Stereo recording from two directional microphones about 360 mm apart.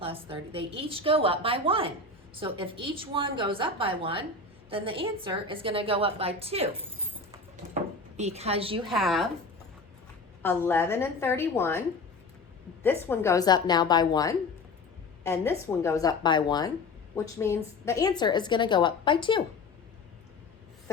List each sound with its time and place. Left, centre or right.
0.0 s a woman's voice: centre
7.3 s a sound: centre
8.9 s a woman's voice: centre
10.4 s a woman's voice: centre
12.8 s a woman's voice: centre